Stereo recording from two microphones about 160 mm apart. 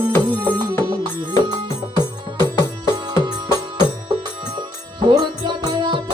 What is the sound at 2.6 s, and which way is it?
Music, 25° right (ahead or behind).